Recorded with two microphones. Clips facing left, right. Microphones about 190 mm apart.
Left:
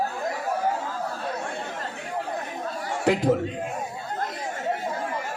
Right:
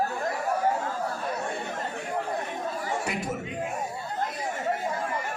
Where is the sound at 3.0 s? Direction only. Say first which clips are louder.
Left 10 dB; 90° left.